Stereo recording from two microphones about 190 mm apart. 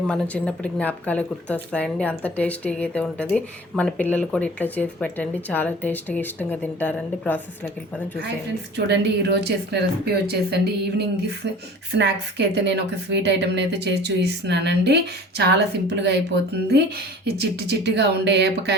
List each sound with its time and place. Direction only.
0.1 s speech: 5° left (ahead or behind)
8.7 s a woman's voice: 60° right (ahead or behind)